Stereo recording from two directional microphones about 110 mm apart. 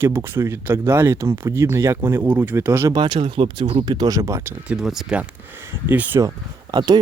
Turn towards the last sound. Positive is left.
turn(degrees=-40)  # may be behind; listen again after turning